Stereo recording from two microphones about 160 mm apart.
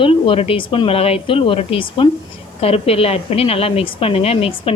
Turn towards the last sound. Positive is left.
turn(degrees=40)  # may be behind; listen again after turning